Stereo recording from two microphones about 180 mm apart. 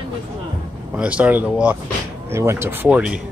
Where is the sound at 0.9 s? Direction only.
5° right (ahead or behind).